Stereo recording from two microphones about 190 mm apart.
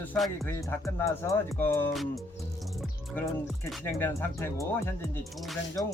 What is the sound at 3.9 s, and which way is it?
Speech, 10° left (ahead or behind).